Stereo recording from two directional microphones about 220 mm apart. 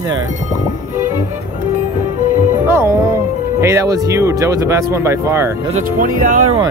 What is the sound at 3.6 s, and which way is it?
Speech, 15° right (ahead or behind).